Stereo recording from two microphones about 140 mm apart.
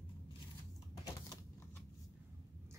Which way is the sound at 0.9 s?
25° left (ahead or behind).